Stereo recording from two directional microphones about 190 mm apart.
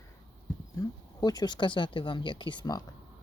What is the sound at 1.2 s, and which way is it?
Speech, 20° left (ahead or behind).